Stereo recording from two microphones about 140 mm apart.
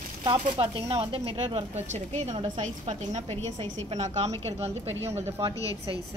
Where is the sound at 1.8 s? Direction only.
50° right (ahead or behind).